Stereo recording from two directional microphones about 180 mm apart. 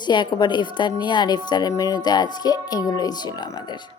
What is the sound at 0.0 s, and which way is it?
A woman's voice, 25° left (ahead or behind).